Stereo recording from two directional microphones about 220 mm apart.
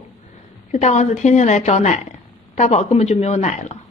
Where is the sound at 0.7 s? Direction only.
30° left (ahead or behind).